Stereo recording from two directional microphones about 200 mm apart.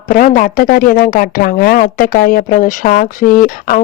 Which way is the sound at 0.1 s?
45° left (ahead or behind).